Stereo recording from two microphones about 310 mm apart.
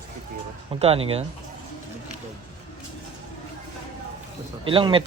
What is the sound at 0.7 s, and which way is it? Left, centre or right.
Speech, centre.